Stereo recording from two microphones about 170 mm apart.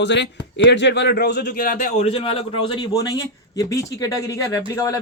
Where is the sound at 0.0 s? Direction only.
90° left; by 1.9 s 55° left (ahead or behind).